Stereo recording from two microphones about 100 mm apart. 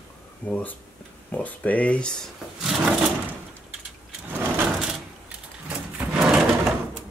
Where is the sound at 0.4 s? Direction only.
15° left (ahead or behind).